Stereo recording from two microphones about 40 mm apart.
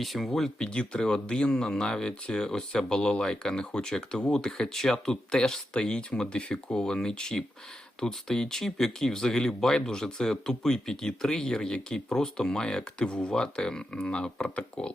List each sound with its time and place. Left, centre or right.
0.0 s speech: centre
0.8 s speech: centre